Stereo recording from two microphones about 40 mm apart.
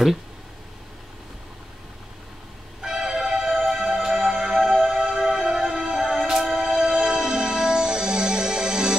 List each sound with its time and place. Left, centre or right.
2.8 s music: centre
4.8 s music: centre
6.1 s music: centre
6.6 s music: centre